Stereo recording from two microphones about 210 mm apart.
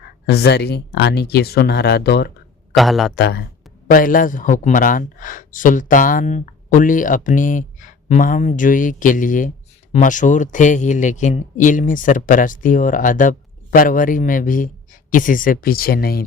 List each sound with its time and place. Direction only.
0.3 s speech: 50° left (ahead or behind)
2.7 s a man's voice: centre (ahead or behind)
3.2 s speech: 50° left (ahead or behind)